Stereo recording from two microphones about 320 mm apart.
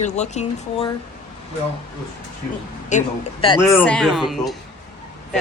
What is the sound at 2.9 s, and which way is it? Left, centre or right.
Speech, centre.